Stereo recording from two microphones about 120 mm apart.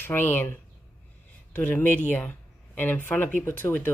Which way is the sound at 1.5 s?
15° left (ahead or behind).